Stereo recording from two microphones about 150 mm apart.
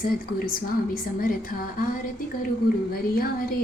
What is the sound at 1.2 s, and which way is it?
Speech, 70° left (ahead or behind).